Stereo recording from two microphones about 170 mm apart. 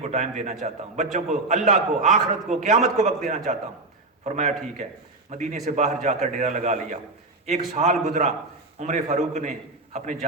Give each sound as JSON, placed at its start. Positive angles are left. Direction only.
{"t": 0.0, "sound": "a man's voice", "side_deg": -45}